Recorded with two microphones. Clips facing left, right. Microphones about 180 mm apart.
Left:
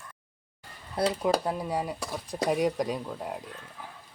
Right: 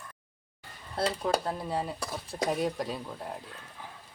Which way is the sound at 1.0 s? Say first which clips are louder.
Left 3 dB; 10° left (ahead or behind).